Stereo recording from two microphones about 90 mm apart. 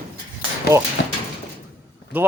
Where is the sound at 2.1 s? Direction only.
20° right (ahead or behind).